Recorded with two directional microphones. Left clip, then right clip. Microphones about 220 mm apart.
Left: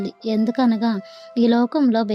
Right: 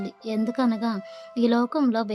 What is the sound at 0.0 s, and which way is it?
Speech, 15° left (ahead or behind).